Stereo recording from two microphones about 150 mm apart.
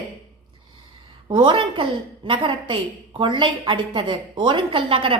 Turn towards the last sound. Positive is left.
turn(degrees=-35)  # may be behind; listen again after turning